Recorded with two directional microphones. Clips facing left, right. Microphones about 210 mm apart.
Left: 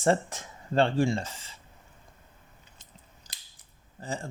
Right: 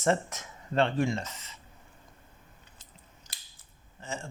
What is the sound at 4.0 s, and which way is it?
Speech, 35° left (ahead or behind).